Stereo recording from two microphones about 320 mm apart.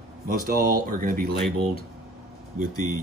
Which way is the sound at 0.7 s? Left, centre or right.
Right.